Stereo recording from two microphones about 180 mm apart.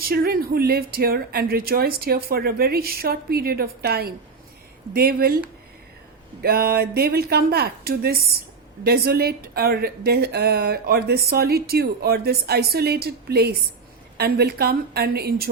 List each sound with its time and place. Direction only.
0.0 s speech: 55° right (ahead or behind)
6.4 s speech: 60° right (ahead or behind)